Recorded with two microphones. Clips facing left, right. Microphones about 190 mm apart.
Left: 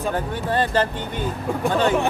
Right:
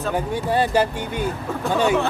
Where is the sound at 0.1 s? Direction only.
10° right (ahead or behind).